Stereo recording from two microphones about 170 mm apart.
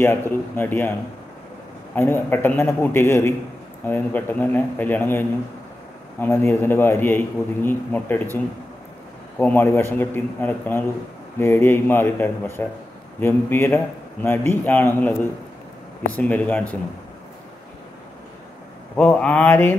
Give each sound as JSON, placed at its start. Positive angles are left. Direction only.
{"t": 0.0, "sound": "a man's voice", "side_deg": 15}
{"t": 2.0, "sound": "a man's voice", "side_deg": 15}
{"t": 9.4, "sound": "a man's voice", "side_deg": 10}
{"t": 18.9, "sound": "a man's voice", "side_deg": 5}